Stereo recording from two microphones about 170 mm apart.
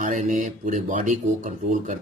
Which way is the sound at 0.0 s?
45° right (ahead or behind).